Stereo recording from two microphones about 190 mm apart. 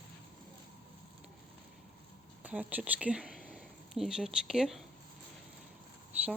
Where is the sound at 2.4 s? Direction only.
5° right (ahead or behind).